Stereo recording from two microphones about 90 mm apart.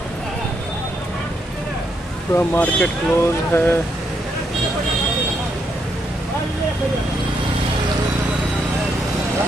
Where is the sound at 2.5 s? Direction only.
10° left (ahead or behind).